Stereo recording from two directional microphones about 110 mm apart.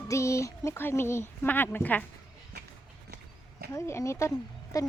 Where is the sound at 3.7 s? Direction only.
25° left (ahead or behind).